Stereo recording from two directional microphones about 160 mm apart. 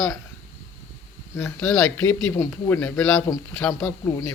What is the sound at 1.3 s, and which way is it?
A man's voice, 15° left (ahead or behind).